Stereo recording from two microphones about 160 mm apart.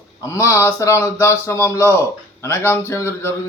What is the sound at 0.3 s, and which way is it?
A man's voice, 20° left (ahead or behind).